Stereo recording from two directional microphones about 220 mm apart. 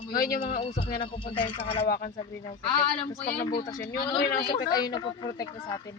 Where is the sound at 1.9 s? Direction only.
40° left (ahead or behind).